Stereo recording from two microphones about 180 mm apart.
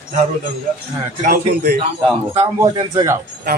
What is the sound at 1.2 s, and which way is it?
Speech, 55° right (ahead or behind).